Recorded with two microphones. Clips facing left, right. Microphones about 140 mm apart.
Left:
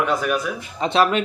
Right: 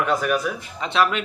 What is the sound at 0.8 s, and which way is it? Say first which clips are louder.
Speech: left 3 dB; 35° left (ahead or behind).